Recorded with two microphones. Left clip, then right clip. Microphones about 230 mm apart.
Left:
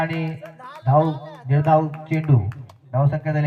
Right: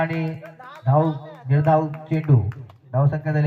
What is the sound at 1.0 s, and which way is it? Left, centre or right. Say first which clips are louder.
Speech: left 2 dB; left.